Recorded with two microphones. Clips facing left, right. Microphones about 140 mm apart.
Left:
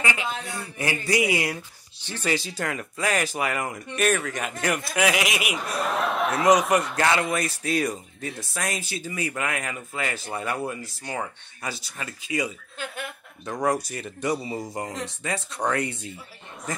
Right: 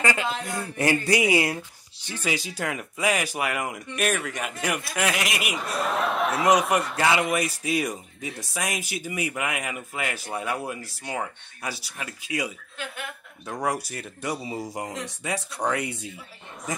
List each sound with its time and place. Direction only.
0.0 s a man's voice: 40° right (ahead or behind)
2.0 s speech: 10° right (ahead or behind)